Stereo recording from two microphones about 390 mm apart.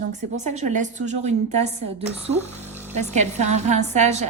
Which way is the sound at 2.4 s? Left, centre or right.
Centre.